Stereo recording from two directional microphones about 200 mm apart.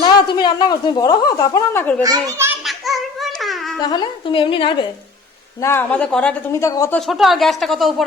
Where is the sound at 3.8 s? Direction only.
20° left (ahead or behind).